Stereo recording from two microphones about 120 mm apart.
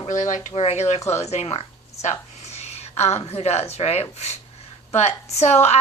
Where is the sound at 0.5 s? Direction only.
60° left (ahead or behind).